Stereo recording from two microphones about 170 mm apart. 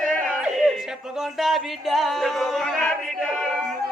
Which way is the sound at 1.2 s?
Centre (ahead or behind).